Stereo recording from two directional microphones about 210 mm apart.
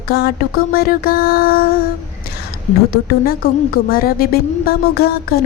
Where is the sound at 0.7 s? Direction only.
45° left (ahead or behind).